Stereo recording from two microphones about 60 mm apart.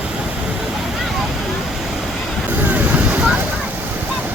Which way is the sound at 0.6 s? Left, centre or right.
Centre.